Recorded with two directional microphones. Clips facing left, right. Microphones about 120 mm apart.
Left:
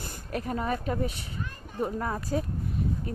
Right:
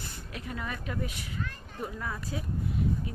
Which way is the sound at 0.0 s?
45° left (ahead or behind).